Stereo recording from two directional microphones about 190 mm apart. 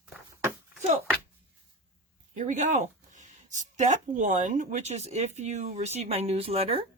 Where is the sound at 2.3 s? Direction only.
40° right (ahead or behind).